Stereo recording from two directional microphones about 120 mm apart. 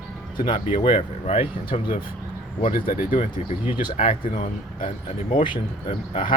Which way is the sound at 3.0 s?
90° left.